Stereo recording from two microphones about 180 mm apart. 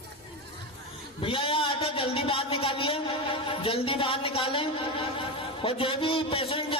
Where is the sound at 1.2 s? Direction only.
30° left (ahead or behind).